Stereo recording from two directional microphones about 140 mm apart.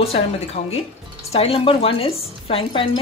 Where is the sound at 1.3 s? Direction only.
45° left (ahead or behind).